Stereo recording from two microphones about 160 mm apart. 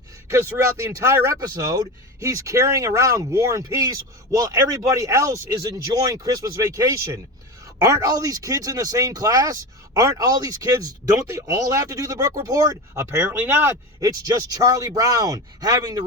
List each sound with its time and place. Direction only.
0.3 s speech: 15° right (ahead or behind)